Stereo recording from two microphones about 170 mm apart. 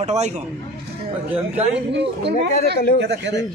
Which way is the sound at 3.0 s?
90° right.